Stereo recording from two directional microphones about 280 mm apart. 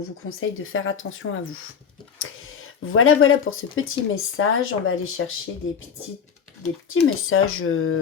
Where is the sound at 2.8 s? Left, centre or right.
Left.